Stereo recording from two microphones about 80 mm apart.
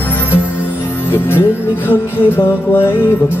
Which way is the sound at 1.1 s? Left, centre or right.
Left.